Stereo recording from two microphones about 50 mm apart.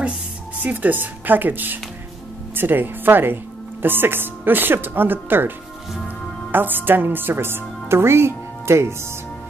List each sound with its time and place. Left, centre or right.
0.6 s speech: right
6.5 s speech: right